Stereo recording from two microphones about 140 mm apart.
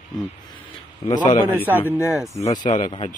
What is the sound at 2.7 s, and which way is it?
Speech, 50° left (ahead or behind).